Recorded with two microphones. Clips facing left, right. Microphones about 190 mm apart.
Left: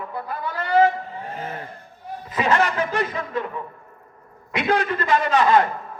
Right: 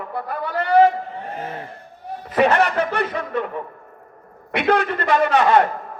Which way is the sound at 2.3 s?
65° right (ahead or behind).